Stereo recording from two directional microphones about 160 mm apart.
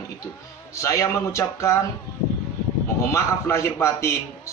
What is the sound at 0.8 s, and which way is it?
Speech, 20° left (ahead or behind).